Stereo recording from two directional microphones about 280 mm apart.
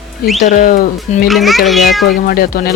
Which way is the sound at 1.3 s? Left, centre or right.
Centre.